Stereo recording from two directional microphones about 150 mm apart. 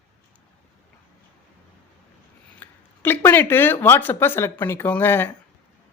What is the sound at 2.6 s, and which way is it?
Speech, 15° left (ahead or behind).